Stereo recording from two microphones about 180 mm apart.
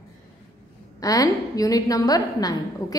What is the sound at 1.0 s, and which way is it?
A woman's voice, 20° left (ahead or behind).